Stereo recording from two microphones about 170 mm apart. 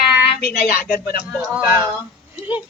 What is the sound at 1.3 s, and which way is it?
Speech, 10° right (ahead or behind).